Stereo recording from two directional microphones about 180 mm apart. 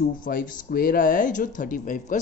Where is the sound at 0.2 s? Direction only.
50° left (ahead or behind).